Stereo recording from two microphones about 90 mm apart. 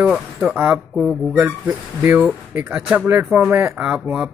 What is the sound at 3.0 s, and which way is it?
Speech, 20° right (ahead or behind).